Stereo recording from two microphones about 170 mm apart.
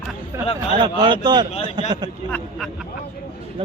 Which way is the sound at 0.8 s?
30° right (ahead or behind).